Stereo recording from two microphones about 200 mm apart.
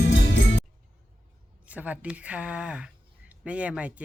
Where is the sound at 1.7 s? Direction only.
5° right (ahead or behind).